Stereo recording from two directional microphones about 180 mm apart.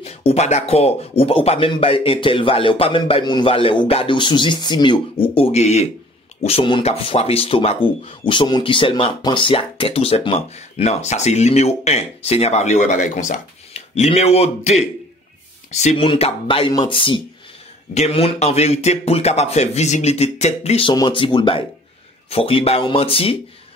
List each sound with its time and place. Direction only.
0.0 s speech: 35° left (ahead or behind)